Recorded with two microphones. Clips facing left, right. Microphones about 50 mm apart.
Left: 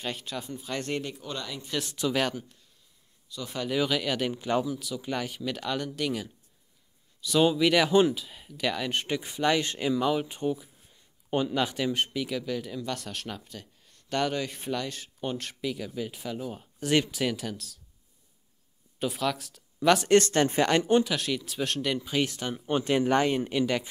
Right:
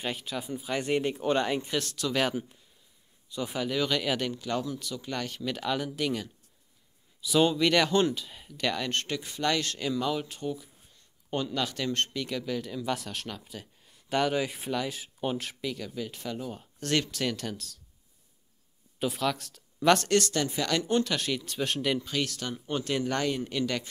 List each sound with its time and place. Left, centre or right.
0.0 s speech: centre
1.0 s speech: right
1.9 s speech: centre
3.3 s speech: right
3.7 s speech: centre
4.3 s speech: centre
4.6 s speech: centre
18.9 s speech: centre
20.1 s speech: left
21.0 s speech: centre
22.0 s speech: centre